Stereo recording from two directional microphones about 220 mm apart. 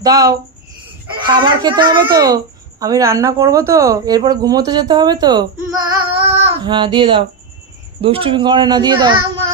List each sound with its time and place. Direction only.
0.0 s a child's voice: 15° right (ahead or behind)
6.3 s child singing: 20° right (ahead or behind)
8.0 s speech: 25° right (ahead or behind)